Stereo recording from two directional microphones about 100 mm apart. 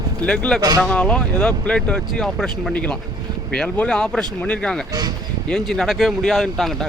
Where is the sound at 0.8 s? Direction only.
10° left (ahead or behind).